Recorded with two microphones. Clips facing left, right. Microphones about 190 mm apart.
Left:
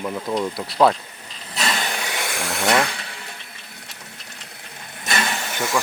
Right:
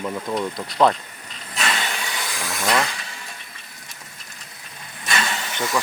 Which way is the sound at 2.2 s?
70° left (ahead or behind).